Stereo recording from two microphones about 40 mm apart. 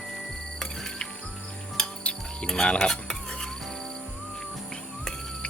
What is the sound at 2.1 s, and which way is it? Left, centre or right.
Cricket, left.